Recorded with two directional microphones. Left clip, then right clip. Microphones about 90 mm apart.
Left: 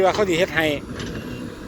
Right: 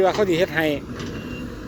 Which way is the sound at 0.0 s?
60° right (ahead or behind).